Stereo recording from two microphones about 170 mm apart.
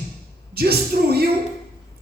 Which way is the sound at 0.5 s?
65° right (ahead or behind).